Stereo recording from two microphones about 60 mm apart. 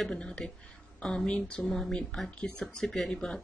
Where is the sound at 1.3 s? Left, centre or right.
Centre.